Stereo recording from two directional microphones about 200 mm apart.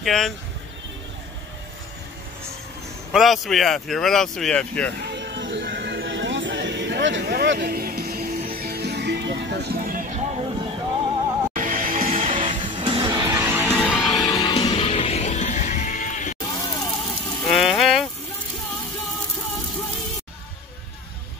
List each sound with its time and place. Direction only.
0.0 s speech: centre (ahead or behind)
3.1 s speech: centre (ahead or behind)
5.0 s music: 60° right (ahead or behind); by 10.7 s 25° right (ahead or behind)
11.5 s music: 40° right (ahead or behind)
12.1 s music: 30° right (ahead or behind); by 13.7 s 10° right (ahead or behind)
13.7 s music: centre (ahead or behind)
14.2 s music: 20° left (ahead or behind); by 16.3 s 40° left (ahead or behind)
16.5 s a sound: 20° left (ahead or behind)
17.5 s a sound: centre (ahead or behind)